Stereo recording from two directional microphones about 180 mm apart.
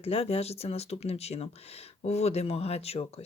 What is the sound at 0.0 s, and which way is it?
Speech, 35° left (ahead or behind).